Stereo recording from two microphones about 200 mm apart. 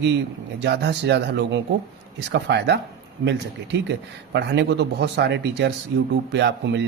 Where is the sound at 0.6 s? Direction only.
55° right (ahead or behind).